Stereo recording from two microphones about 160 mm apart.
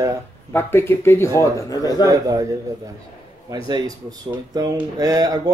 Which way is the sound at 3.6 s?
25° right (ahead or behind).